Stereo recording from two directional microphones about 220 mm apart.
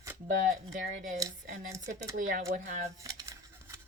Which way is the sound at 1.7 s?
15° right (ahead or behind).